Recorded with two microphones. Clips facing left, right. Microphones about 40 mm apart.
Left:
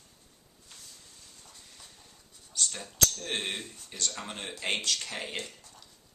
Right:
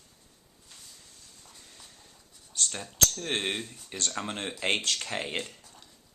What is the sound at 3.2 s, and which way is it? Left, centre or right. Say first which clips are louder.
Speech: right 3 dB; right.